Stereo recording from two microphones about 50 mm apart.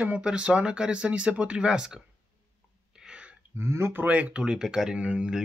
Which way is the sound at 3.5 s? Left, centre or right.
Right.